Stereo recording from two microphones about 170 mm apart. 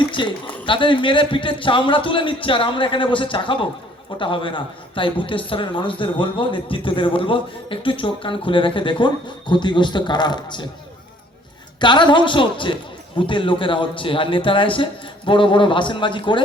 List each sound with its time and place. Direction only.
0.1 s a man's voice: 30° left (ahead or behind)
11.8 s a man's voice: 30° left (ahead or behind)